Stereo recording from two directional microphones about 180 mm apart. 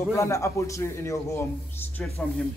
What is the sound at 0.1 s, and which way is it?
A man's voice, 15° left (ahead or behind).